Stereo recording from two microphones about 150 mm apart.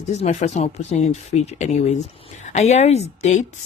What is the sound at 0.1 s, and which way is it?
Speech, 50° left (ahead or behind).